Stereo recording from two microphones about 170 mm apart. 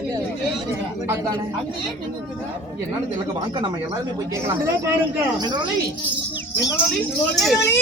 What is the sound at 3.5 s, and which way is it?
Speech, 25° right (ahead or behind).